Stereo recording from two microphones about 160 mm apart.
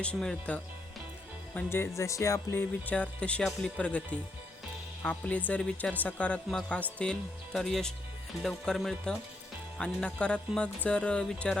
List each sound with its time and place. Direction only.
0.0 s speech: 5° left (ahead or behind)